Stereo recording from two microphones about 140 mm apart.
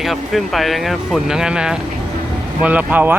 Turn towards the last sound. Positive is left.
turn(degrees=-10)  # may be behind; listen again after turning